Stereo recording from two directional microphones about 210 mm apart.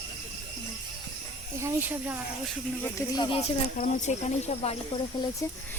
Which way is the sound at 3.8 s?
35° left (ahead or behind).